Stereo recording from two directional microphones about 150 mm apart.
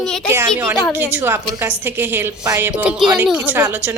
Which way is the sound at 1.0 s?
15° right (ahead or behind).